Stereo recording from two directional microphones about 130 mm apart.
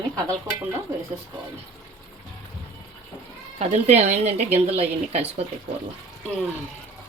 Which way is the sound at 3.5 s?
55° right (ahead or behind).